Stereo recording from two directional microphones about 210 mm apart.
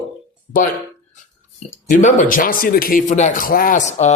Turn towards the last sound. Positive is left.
turn(degrees=30)  # may be behind; listen again after turning